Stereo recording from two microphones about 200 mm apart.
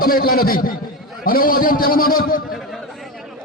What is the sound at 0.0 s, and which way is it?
A man's voice, 45° left (ahead or behind).